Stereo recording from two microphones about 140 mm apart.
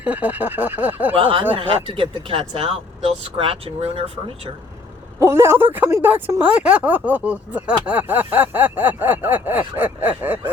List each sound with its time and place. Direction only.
0.0 s speech: 10° right (ahead or behind)
1.1 s speech: 40° right (ahead or behind)
5.2 s speech: 20° right (ahead or behind)